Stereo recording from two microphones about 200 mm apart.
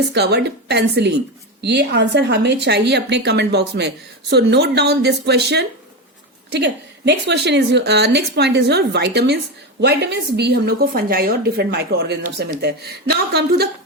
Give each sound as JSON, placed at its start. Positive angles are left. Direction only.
{"t": 0.1, "sound": "a woman's voice", "side_deg": -55}